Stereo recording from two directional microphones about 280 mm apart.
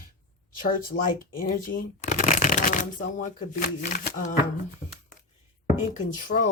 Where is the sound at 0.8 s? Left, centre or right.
Left.